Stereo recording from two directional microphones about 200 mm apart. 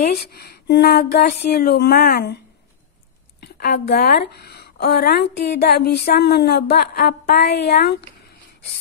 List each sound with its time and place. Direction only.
0.1 s speech: 50° left (ahead or behind)
3.3 s speech: 55° left (ahead or behind)